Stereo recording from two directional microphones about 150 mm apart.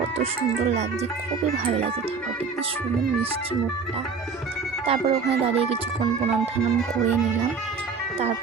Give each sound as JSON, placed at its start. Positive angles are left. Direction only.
{"t": 0.2, "sound": "speech", "side_deg": -45}
{"t": 1.6, "sound": "music", "side_deg": -40}
{"t": 4.9, "sound": "music", "side_deg": -40}